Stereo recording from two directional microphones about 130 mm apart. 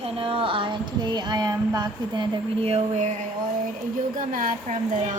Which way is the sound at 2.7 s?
60° right (ahead or behind).